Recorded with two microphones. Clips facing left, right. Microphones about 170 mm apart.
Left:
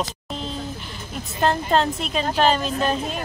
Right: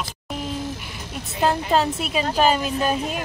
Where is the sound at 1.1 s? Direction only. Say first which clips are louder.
Even; 5° right (ahead or behind).